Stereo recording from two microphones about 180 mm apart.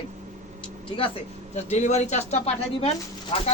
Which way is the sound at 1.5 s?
40° left (ahead or behind).